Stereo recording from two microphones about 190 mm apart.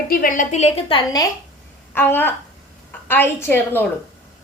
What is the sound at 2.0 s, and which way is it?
A woman's voice, 10° left (ahead or behind).